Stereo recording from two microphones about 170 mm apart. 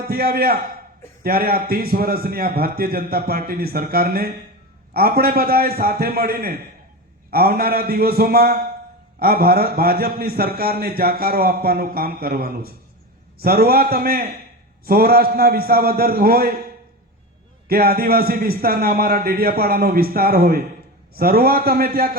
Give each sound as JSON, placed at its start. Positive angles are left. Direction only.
{"t": 0.1, "sound": "a man's voice", "side_deg": -65}
{"t": 17.7, "sound": "a man's voice", "side_deg": -60}